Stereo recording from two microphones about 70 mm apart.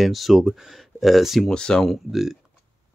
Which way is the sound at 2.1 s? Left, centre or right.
Centre.